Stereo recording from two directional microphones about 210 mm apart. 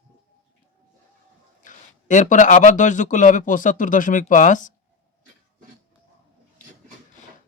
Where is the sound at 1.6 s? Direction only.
35° left (ahead or behind).